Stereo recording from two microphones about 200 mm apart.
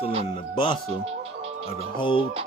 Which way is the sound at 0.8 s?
30° right (ahead or behind).